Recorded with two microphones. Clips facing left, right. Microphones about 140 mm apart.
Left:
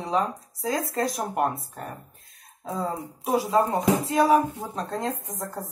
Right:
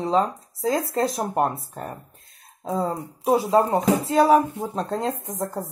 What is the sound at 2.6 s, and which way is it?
Speech, centre (ahead or behind).